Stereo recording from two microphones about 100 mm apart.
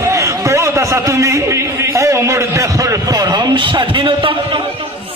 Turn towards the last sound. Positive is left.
turn(degrees=-60)  # may be behind; listen again after turning